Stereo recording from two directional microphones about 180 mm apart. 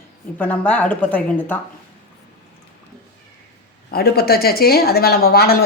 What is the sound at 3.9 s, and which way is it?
A woman's voice, 60° left (ahead or behind).